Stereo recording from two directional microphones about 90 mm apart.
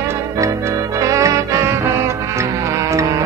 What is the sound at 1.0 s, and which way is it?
Music, 35° right (ahead or behind).